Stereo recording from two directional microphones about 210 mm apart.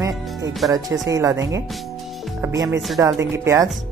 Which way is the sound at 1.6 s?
Centre (ahead or behind).